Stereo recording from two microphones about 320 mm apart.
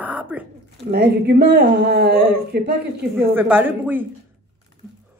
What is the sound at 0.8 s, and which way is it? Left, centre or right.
Speech, right.